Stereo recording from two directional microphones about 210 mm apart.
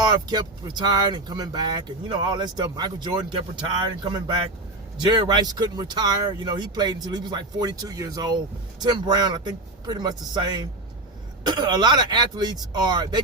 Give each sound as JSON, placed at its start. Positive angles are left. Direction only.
{"t": 0.0, "sound": "speech", "side_deg": -20}
{"t": 4.9, "sound": "speech", "side_deg": -20}